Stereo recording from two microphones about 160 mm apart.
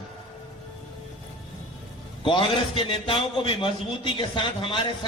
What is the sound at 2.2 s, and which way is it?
A man's voice, 30° left (ahead or behind).